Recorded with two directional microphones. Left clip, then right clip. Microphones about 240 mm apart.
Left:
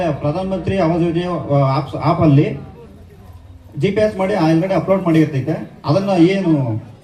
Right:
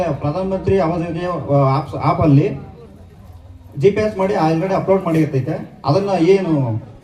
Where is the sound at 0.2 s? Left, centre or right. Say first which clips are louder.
Even; right.